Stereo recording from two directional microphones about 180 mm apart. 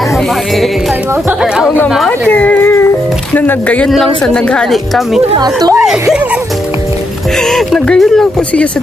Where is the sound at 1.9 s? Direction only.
5° left (ahead or behind).